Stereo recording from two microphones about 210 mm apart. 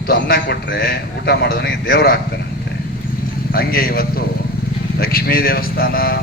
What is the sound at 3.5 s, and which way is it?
A man's voice, 45° left (ahead or behind).